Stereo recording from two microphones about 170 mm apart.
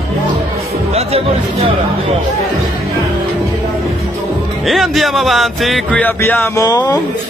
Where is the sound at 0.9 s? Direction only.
35° right (ahead or behind).